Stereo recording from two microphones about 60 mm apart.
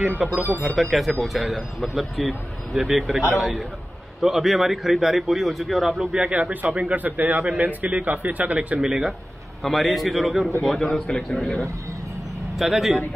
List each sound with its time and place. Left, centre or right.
0.3 s speech: right
0.7 s a man's voice: centre
6.7 s speech: centre
7.0 s speech: right
9.6 s a man's voice: centre